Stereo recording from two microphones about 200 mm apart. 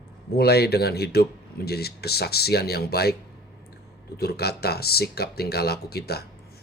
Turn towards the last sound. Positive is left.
turn(degrees=50)  # may be behind; listen again after turning